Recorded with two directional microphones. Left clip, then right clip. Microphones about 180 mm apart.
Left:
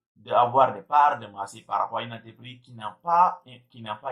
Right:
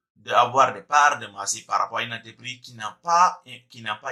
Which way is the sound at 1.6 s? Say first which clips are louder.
Right 2 dB; 20° right (ahead or behind).